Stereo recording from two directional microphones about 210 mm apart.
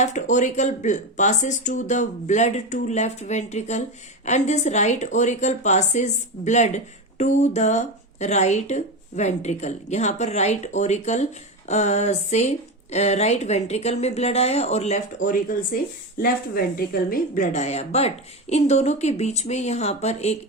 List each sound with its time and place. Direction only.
0.0 s speech: 35° left (ahead or behind)